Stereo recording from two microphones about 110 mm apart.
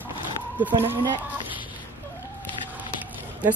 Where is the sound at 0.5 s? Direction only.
15° right (ahead or behind).